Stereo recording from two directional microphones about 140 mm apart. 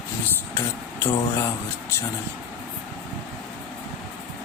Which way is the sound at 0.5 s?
20° left (ahead or behind).